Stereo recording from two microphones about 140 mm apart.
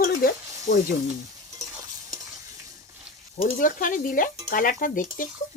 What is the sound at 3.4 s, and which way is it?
Speech, 80° left.